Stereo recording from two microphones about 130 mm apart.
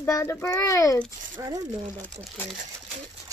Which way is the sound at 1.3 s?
25° right (ahead or behind).